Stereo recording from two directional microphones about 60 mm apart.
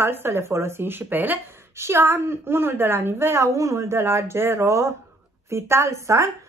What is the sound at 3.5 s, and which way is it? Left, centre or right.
Speech, right.